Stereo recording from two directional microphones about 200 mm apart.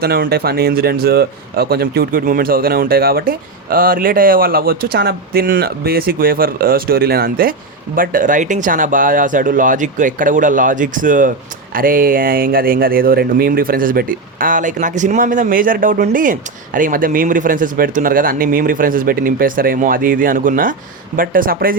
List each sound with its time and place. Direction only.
0.0 s speech: 50° right (ahead or behind)